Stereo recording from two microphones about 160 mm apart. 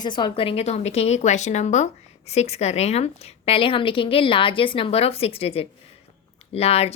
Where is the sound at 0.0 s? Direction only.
30° left (ahead or behind).